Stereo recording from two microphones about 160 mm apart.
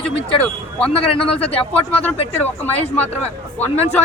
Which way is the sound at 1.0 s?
35° left (ahead or behind).